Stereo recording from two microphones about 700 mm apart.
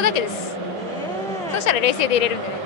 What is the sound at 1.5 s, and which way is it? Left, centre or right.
Speech, left.